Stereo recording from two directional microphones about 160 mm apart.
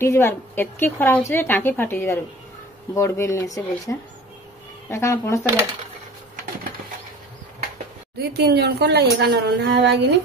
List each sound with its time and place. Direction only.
0.0 s a woman's voice: 15° left (ahead or behind)
8.2 s a woman's voice: 90° right